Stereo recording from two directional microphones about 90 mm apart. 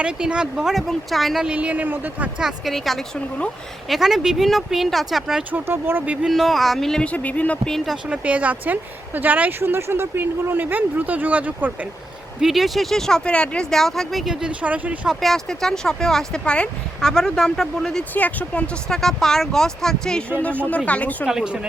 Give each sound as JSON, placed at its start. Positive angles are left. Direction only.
{"t": 0.0, "sound": "speech", "side_deg": -10}
{"t": 1.5, "sound": "speech", "side_deg": -15}
{"t": 2.5, "sound": "speech", "side_deg": 0}
{"t": 5.4, "sound": "a woman's voice", "side_deg": -20}
{"t": 6.1, "sound": "speech", "side_deg": -5}
{"t": 8.1, "sound": "a woman's voice", "side_deg": -15}
{"t": 12.4, "sound": "speech", "side_deg": 0}
{"t": 14.4, "sound": "speech", "side_deg": -15}
{"t": 15.1, "sound": "speech", "side_deg": 0}
{"t": 18.1, "sound": "speech", "side_deg": 15}
{"t": 21.2, "sound": "speech", "side_deg": -10}